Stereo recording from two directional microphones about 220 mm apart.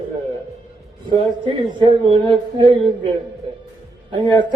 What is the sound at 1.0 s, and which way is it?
Speech, 20° right (ahead or behind).